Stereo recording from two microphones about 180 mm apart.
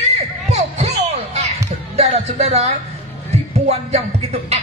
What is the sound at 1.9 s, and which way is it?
Music, 35° right (ahead or behind).